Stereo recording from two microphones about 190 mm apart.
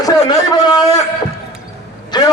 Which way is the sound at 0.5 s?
20° left (ahead or behind).